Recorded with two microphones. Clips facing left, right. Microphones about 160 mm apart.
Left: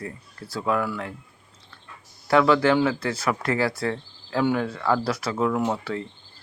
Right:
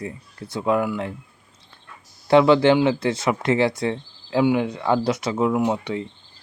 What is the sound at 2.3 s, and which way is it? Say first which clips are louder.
Speech: right 4 dB; 25° right (ahead or behind).